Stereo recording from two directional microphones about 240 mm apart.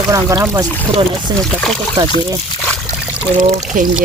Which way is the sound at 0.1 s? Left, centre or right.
Centre.